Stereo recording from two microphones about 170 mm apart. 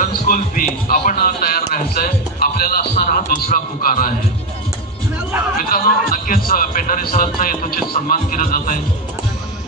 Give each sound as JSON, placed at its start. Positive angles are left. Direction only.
{"t": 0.0, "sound": "a man's voice", "side_deg": 50}
{"t": 5.6, "sound": "a man's voice", "side_deg": 55}